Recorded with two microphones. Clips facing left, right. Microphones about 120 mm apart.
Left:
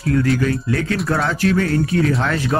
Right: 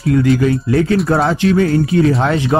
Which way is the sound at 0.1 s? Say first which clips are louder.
Right 5 dB; 20° right (ahead or behind).